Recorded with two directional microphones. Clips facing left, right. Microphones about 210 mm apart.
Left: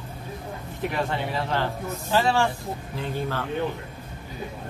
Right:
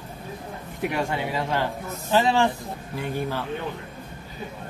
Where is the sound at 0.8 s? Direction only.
10° right (ahead or behind).